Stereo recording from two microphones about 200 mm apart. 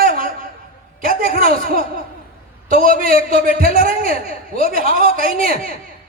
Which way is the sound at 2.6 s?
45° right (ahead or behind).